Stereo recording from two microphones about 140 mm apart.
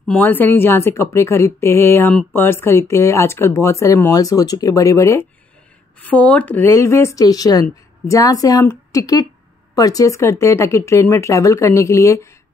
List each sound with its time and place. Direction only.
0.0 s speech: 10° left (ahead or behind)
5.9 s speech: 10° left (ahead or behind)